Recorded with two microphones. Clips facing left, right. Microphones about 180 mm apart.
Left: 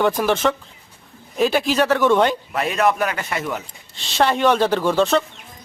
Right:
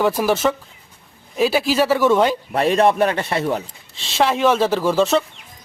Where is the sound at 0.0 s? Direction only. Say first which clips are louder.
Right 1 dB; 5° right (ahead or behind).